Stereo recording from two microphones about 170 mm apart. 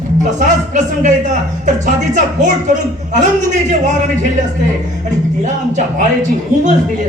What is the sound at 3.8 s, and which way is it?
Speech, 45° right (ahead or behind).